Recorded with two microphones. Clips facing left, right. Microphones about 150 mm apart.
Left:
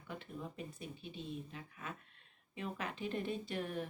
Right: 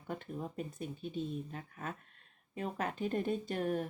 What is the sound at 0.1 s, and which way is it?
Speech, 45° right (ahead or behind).